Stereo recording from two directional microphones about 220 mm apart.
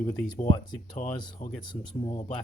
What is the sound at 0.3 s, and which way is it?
Speech, 30° left (ahead or behind).